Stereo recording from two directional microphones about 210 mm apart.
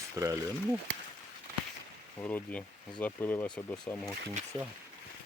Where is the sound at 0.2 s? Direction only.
15° right (ahead or behind).